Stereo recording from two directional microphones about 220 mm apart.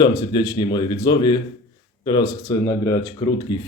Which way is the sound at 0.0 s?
20° left (ahead or behind).